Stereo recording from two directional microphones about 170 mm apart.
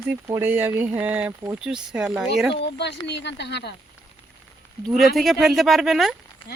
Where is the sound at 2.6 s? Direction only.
90° left.